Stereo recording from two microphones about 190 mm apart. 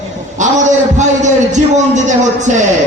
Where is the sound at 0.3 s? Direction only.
40° right (ahead or behind).